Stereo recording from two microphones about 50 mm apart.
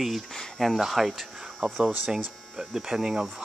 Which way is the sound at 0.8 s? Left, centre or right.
Centre.